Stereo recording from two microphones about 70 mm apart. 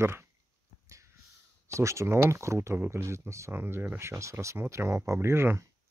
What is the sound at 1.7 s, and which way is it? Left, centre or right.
Speech, right.